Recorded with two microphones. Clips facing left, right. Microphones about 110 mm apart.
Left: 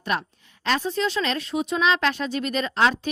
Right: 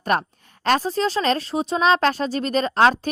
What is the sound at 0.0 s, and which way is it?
A woman's voice, 45° right (ahead or behind).